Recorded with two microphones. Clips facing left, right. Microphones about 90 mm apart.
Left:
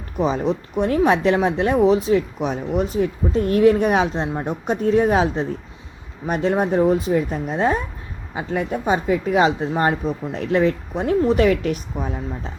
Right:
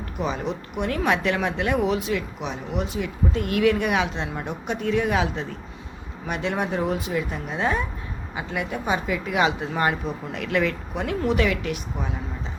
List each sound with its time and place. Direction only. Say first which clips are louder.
0.2 s speech: left 7 dB; 35° left (ahead or behind)